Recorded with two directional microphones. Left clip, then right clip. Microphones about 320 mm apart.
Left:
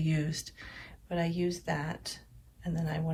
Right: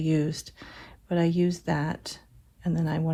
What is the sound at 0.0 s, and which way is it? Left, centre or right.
Speech, centre.